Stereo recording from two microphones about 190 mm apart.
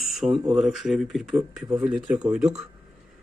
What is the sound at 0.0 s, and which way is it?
Speech, centre (ahead or behind).